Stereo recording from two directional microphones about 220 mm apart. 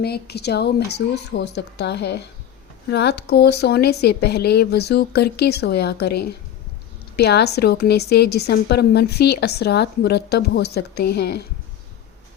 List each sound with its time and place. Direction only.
0.0 s a woman's voice: 45° left (ahead or behind)